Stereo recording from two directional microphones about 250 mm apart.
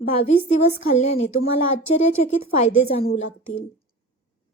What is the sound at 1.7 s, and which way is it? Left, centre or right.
Speech, left.